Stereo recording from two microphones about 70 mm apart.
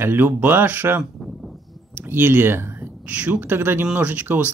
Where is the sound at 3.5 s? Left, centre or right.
Right.